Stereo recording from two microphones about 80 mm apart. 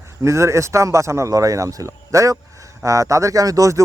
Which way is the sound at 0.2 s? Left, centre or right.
Right.